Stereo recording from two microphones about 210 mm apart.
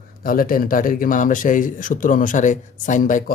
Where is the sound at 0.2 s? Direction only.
45° left (ahead or behind).